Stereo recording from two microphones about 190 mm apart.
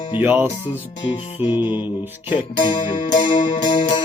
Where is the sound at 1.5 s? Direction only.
10° right (ahead or behind).